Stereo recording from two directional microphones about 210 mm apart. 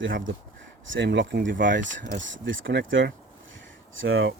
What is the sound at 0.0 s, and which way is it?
Speech, 65° right (ahead or behind).